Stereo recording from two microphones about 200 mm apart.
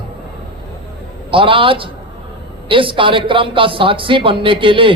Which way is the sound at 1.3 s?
25° right (ahead or behind).